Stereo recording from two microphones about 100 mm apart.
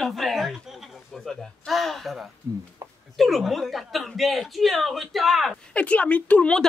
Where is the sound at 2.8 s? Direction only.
30° right (ahead or behind).